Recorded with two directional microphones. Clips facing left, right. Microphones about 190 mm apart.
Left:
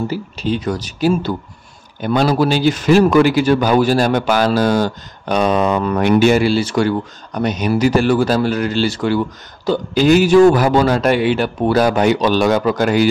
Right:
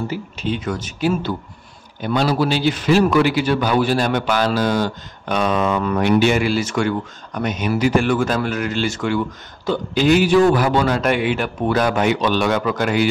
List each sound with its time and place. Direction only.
0.1 s a man's voice: 35° left (ahead or behind)
2.0 s a man's voice: 50° left (ahead or behind)